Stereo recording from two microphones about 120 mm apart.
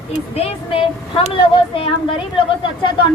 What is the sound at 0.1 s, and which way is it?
Speech, 60° left (ahead or behind).